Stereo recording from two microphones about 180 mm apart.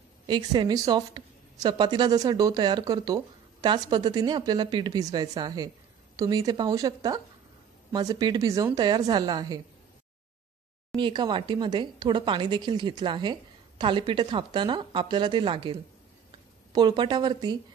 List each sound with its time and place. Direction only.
0.3 s speech: 25° right (ahead or behind)
11.0 s speech: 25° right (ahead or behind)